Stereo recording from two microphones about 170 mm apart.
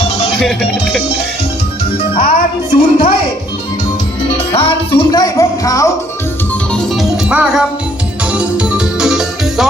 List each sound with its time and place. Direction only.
0.3 s music: centre (ahead or behind)
2.1 s speech: 35° left (ahead or behind)
4.5 s music: 30° left (ahead or behind)
6.9 s music: 5° right (ahead or behind)